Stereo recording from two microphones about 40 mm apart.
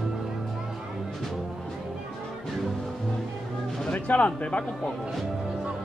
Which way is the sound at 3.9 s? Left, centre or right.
Left.